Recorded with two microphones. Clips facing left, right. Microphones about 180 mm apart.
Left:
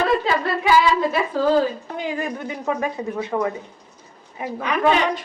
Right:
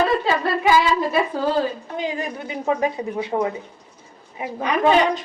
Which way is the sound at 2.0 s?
20° right (ahead or behind).